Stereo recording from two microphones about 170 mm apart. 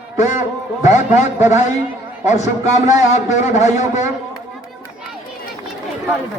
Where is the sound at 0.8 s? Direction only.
45° left (ahead or behind).